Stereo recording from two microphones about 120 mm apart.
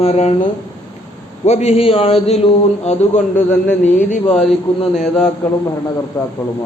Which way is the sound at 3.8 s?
90° left.